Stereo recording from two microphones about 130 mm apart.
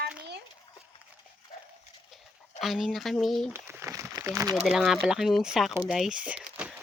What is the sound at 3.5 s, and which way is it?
Crumpling, 20° right (ahead or behind).